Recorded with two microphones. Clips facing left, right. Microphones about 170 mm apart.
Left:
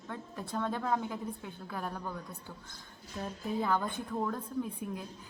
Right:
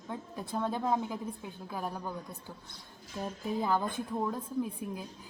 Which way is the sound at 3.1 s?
10° right (ahead or behind).